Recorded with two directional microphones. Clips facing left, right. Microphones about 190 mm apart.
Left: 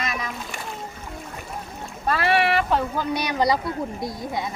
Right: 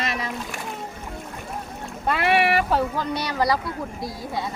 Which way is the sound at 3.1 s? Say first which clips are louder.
Left 3 dB; 15° left (ahead or behind).